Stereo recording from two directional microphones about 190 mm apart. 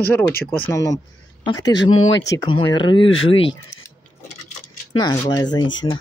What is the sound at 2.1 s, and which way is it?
Speech, 65° left (ahead or behind).